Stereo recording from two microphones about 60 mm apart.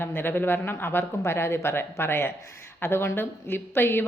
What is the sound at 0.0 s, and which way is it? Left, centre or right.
Speech, left.